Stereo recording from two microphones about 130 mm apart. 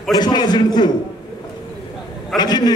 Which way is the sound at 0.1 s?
35° left (ahead or behind).